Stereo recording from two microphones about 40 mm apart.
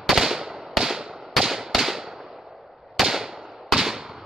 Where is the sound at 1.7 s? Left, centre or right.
Centre.